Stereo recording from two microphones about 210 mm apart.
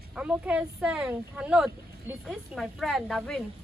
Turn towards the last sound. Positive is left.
turn(degrees=0)  # may be behind; listen again after turning